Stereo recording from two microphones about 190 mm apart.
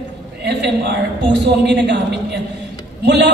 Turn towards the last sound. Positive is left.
turn(degrees=-65)  # may be behind; listen again after turning